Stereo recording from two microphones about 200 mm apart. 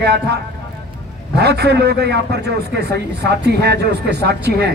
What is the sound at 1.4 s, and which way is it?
A man's voice, 55° right (ahead or behind).